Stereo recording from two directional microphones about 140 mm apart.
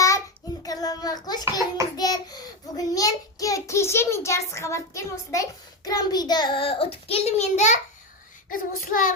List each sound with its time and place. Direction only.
0.6 s child singing: 25° left (ahead or behind); by 7.8 s 55° left (ahead or behind)
8.4 s child singing: 80° left